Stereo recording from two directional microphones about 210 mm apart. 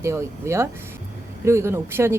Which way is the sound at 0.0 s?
15° right (ahead or behind).